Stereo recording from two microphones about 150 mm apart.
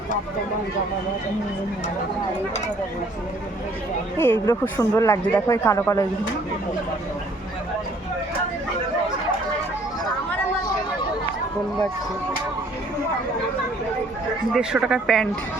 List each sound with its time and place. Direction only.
4.2 s speech: 15° left (ahead or behind)
14.5 s speech: 5° right (ahead or behind)